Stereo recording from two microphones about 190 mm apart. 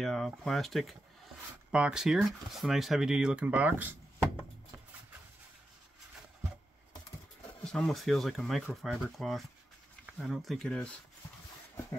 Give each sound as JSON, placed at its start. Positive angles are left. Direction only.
{"t": 0.0, "sound": "speech", "side_deg": 0}
{"t": 7.6, "sound": "speech", "side_deg": 5}